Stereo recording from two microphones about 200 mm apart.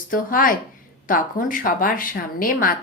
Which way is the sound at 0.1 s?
45° left (ahead or behind).